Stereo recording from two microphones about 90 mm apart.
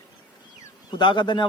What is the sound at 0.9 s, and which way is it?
Speech, 60° left (ahead or behind).